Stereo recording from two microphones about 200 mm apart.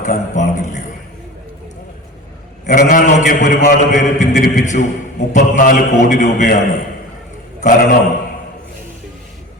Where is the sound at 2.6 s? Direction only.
45° left (ahead or behind).